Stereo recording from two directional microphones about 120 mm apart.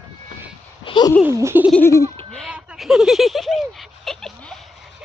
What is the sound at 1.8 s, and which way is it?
Giggle, 20° left (ahead or behind).